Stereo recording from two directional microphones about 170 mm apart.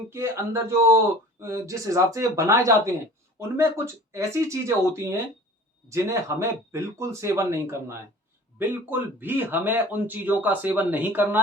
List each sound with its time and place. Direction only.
0.1 s speech: 15° right (ahead or behind)
4.1 s speech: 15° right (ahead or behind)